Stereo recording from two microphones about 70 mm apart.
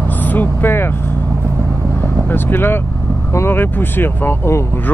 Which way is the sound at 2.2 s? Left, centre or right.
Left.